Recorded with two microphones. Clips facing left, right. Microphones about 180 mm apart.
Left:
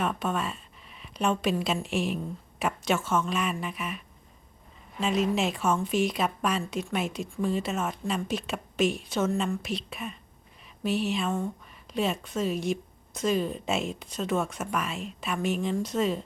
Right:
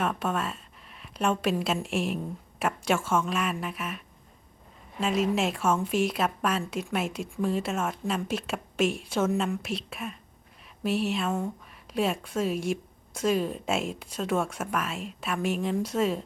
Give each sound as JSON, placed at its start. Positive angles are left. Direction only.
{"t": 0.0, "sound": "a woman's voice", "side_deg": -5}